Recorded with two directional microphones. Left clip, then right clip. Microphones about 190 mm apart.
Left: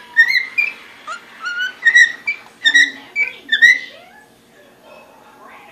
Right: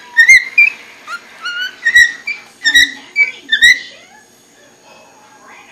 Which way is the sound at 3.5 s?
10° left (ahead or behind).